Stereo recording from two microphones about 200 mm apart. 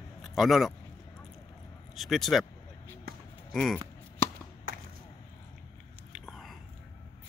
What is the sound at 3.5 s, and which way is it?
Speech, centre (ahead or behind).